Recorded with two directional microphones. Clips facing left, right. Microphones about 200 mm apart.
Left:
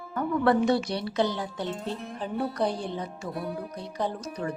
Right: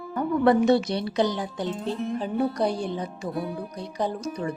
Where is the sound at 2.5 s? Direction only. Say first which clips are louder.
Right 3 dB; 10° right (ahead or behind).